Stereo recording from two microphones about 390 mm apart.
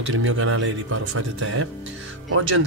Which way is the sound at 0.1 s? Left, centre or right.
Right.